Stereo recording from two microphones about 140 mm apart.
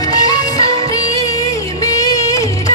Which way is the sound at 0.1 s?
25° left (ahead or behind).